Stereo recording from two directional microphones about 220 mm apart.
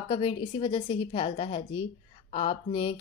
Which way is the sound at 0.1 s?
25° left (ahead or behind).